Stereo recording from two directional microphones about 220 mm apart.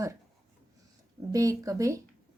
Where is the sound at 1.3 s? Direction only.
15° right (ahead or behind).